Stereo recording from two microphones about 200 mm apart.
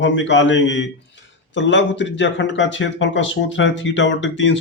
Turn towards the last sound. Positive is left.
turn(degrees=70)  # may be behind; listen again after turning